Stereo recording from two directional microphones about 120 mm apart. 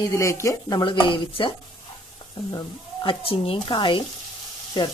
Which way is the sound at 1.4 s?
45° left (ahead or behind).